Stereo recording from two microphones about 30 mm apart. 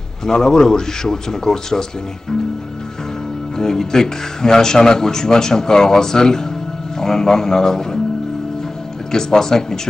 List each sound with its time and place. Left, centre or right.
0.2 s speech: centre
3.5 s speech: centre
9.1 s speech: centre